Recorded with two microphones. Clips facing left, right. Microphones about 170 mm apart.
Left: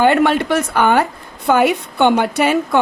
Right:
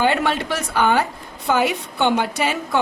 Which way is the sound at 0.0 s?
55° left (ahead or behind).